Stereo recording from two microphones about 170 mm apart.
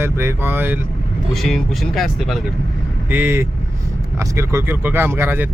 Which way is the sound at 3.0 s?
10° right (ahead or behind).